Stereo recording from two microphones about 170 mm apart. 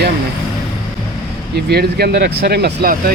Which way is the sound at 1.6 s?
70° right (ahead or behind).